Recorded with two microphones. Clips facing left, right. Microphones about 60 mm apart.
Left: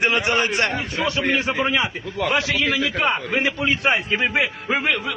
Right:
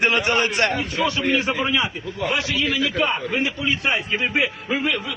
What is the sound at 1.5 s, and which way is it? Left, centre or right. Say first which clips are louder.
Speech: left 1 dB; left.